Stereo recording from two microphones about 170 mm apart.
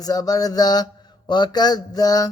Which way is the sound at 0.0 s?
20° left (ahead or behind).